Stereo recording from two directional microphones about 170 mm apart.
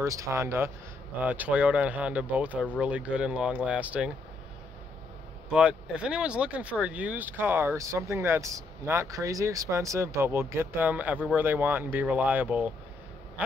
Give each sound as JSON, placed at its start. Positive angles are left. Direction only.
{"t": 0.0, "sound": "speech", "side_deg": -20}
{"t": 2.5, "sound": "speech", "side_deg": 10}
{"t": 2.8, "sound": "speech", "side_deg": -5}
{"t": 5.5, "sound": "speech", "side_deg": -5}